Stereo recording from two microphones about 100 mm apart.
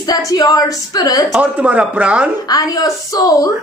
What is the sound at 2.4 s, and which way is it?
A woman's voice, 40° left (ahead or behind).